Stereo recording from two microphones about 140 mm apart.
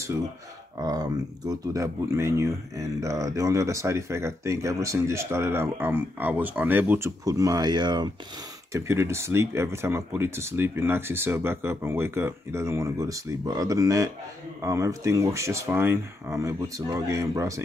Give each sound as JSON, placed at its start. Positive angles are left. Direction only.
{"t": 0.7, "sound": "speech", "side_deg": -25}
{"t": 7.2, "sound": "speech", "side_deg": -25}
{"t": 8.7, "sound": "speech", "side_deg": -20}